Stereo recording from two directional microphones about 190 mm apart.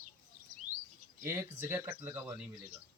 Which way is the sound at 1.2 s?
15° right (ahead or behind).